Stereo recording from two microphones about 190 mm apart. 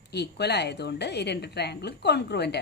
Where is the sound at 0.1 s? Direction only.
60° left (ahead or behind).